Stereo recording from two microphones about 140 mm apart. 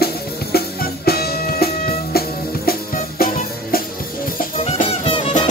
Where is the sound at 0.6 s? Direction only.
90° left.